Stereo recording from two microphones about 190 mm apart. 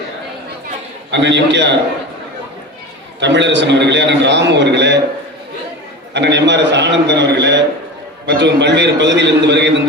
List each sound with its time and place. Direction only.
1.1 s a man's voice: 65° right (ahead or behind)
3.2 s a man's voice: 70° right (ahead or behind)
6.1 s a man's voice: 65° right (ahead or behind)